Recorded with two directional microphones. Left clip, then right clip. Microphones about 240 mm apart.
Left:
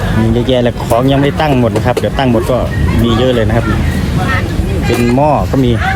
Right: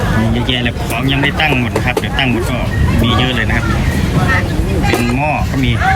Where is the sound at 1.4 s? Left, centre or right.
Left.